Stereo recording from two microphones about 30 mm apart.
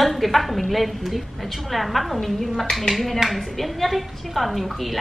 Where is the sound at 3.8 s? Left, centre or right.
Centre.